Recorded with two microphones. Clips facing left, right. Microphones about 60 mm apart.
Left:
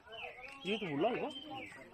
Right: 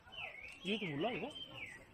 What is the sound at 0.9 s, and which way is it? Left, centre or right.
Speech, left.